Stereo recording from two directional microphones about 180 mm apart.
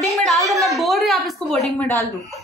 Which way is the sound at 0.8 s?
Centre (ahead or behind).